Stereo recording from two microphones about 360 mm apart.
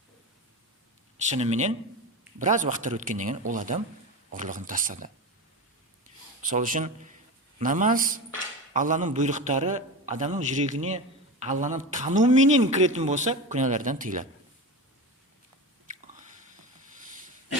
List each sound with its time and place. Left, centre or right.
1.3 s a man's voice: centre
6.5 s a man's voice: right
15.9 s biting: right